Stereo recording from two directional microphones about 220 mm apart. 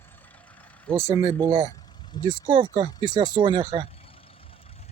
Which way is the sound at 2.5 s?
20° right (ahead or behind).